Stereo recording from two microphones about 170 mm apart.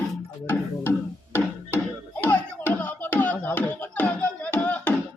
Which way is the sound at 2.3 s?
10° left (ahead or behind).